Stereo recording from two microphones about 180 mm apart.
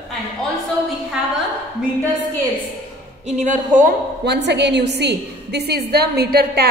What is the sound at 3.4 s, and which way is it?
Speech, 45° right (ahead or behind).